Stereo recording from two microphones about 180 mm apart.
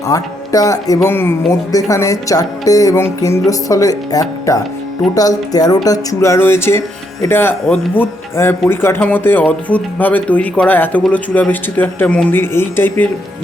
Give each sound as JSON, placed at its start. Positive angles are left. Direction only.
{"t": 0.1, "sound": "music", "side_deg": 20}
{"t": 1.0, "sound": "speech", "side_deg": 10}
{"t": 1.7, "sound": "music", "side_deg": 15}
{"t": 5.1, "sound": "speech", "side_deg": 20}